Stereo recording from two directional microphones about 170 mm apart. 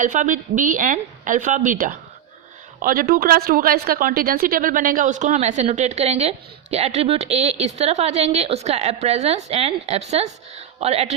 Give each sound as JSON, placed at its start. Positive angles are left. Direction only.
{"t": 0.0, "sound": "a woman's voice", "side_deg": -50}